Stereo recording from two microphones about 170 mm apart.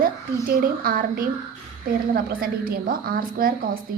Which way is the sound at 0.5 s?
55° right (ahead or behind).